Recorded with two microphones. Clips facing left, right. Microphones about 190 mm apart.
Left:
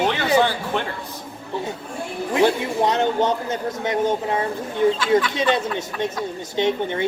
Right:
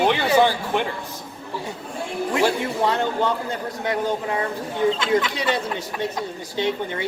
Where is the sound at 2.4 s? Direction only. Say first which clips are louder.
Left 3 dB; 20° left (ahead or behind).